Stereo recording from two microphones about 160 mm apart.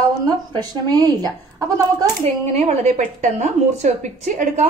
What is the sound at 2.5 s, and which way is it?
A woman's voice, 45° right (ahead or behind).